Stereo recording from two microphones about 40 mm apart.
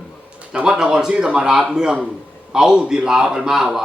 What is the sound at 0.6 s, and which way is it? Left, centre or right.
Speech, centre.